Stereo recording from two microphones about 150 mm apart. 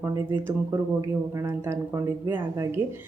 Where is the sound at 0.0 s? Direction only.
15° right (ahead or behind).